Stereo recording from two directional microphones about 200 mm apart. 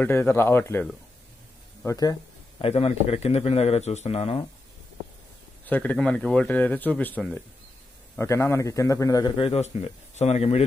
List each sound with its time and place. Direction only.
0.0 s speech: 10° left (ahead or behind)
1.9 s speech: 20° left (ahead or behind)
2.6 s speech: 30° left (ahead or behind)
5.7 s a man's voice: 10° left (ahead or behind); by 10.6 s 30° left (ahead or behind)